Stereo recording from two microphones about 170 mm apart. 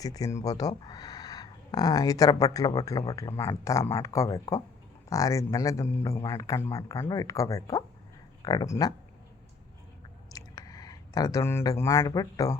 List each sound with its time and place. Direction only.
0.0 s a man's voice: 20° left (ahead or behind)
10.3 s speech: 20° left (ahead or behind)